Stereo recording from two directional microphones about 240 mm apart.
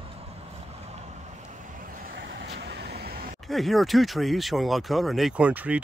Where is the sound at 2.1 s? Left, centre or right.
Right.